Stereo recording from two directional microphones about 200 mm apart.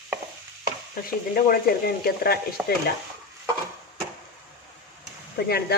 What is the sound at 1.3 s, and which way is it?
Speech, 50° left (ahead or behind).